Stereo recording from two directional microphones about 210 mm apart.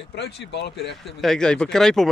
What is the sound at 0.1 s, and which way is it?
Speech, 55° left (ahead or behind).